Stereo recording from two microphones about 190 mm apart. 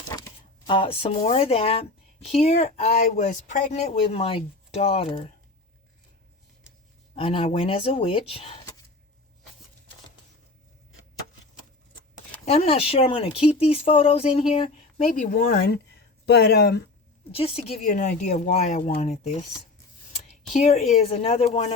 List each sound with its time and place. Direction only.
0.1 s speech: 20° left (ahead or behind); by 3.8 s 40° left (ahead or behind)
4.0 s speech: 30° left (ahead or behind)
7.2 s speech: 30° left (ahead or behind)
12.5 s speech: 35° left (ahead or behind)
15.0 s speech: 45° left (ahead or behind)
17.3 s speech: 30° left (ahead or behind)